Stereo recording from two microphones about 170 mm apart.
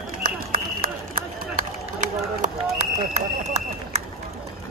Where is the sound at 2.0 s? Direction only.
45° right (ahead or behind).